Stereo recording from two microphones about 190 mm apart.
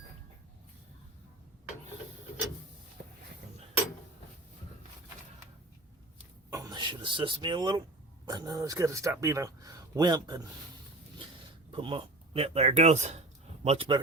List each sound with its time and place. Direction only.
6.5 s a man's voice: 20° right (ahead or behind)
11.7 s speech: 25° right (ahead or behind)